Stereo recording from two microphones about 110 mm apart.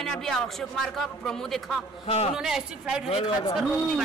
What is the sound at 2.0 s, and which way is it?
Speech, 70° left (ahead or behind).